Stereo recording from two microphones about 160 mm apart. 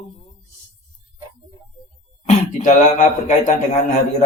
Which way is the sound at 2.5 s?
50° left (ahead or behind).